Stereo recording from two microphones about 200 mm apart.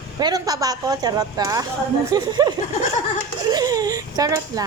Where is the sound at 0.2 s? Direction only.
20° right (ahead or behind).